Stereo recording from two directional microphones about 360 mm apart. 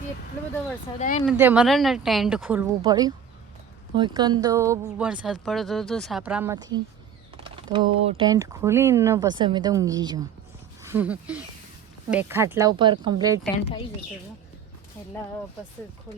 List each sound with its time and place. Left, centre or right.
0.9 s speech: left
1.2 s speech: centre